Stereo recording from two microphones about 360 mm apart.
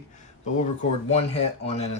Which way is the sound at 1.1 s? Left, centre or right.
Centre.